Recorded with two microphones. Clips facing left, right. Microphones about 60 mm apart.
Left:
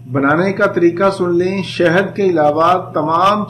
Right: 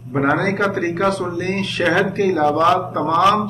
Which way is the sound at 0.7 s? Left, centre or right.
Left.